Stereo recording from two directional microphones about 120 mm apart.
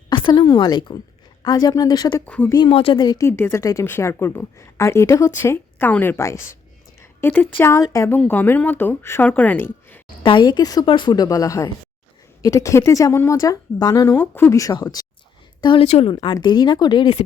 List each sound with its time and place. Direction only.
0.1 s a sound: 40° left (ahead or behind)
0.4 s speech: 35° left (ahead or behind)
2.2 s speech: 10° left (ahead or behind)
2.6 s speech: 50° left (ahead or behind)
3.0 s speech: 35° left (ahead or behind)
3.2 s a woman's voice: 20° left (ahead or behind)
7.0 s a sound: 20° left (ahead or behind)
7.6 s a woman's voice: 25° left (ahead or behind)
8.2 s speech: 15° left (ahead or behind)
10.2 s a woman's voice: 40° left (ahead or behind)
14.2 s a woman's voice: 20° left (ahead or behind)
15.6 s speech: 45° left (ahead or behind)
15.9 s speech: 60° left (ahead or behind)
16.2 s speech: 40° left (ahead or behind)